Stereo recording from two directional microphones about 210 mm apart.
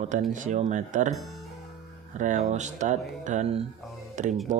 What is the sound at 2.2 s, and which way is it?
Speech, 35° right (ahead or behind).